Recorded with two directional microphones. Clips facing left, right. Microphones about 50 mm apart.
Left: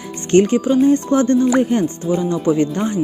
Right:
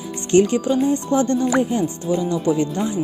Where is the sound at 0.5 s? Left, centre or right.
Left.